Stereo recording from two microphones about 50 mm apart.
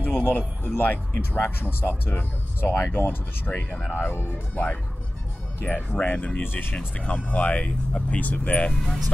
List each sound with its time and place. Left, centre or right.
0.0 s speech: left
6.4 s speech: left
7.1 s speech: left